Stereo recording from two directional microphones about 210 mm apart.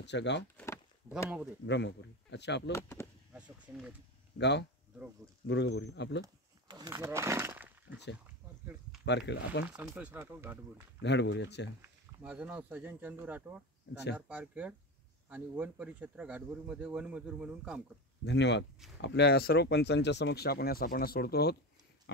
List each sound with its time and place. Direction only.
0.0 s speech: 55° left (ahead or behind)
0.6 s a sound: 15° left (ahead or behind)
1.7 s speech: 55° left (ahead or behind)
2.7 s speech: 15° left (ahead or behind)
3.3 s a sound: 5° right (ahead or behind)
4.4 s speech: 55° left (ahead or behind)
6.2 s a sound: 20° right (ahead or behind)
9.0 s speech: 55° left (ahead or behind)
9.7 s speech: 5° right (ahead or behind)
11.0 s speech: 55° left (ahead or behind)
11.8 s speech: 5° right (ahead or behind)
18.2 s speech: 55° left (ahead or behind)